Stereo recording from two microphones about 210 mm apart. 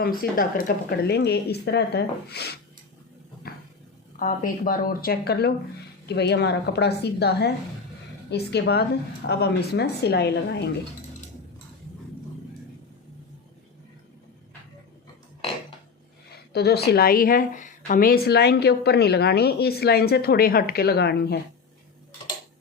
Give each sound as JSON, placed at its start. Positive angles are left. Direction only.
{"t": 0.0, "sound": "a woman's voice", "side_deg": 45}
{"t": 4.2, "sound": "a woman's voice", "side_deg": 40}
{"t": 16.5, "sound": "a woman's voice", "side_deg": 50}